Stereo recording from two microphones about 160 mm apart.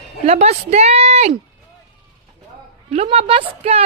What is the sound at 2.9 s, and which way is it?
Speech, 40° right (ahead or behind).